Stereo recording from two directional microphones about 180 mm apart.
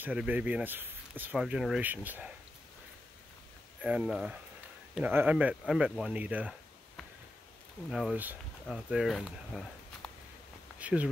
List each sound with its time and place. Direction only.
0.0 s speech: 10° right (ahead or behind)
3.8 s speech: 5° right (ahead or behind)
7.9 s speech: 5° right (ahead or behind)
10.8 s speech: 5° right (ahead or behind)